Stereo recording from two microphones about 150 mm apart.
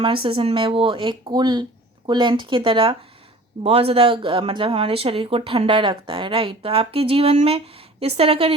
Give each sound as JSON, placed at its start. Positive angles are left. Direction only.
{"t": 0.0, "sound": "speech", "side_deg": -35}